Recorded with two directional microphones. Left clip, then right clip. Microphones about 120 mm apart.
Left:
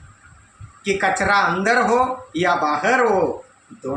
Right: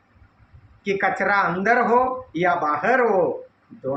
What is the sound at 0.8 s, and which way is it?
Speech, 25° left (ahead or behind).